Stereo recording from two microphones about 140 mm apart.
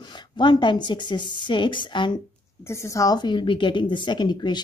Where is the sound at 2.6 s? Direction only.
20° left (ahead or behind).